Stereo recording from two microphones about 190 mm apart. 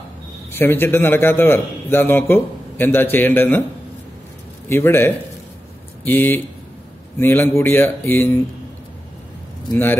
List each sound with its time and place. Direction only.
0.5 s a man's voice: 10° left (ahead or behind)
4.6 s a man's voice: 10° left (ahead or behind)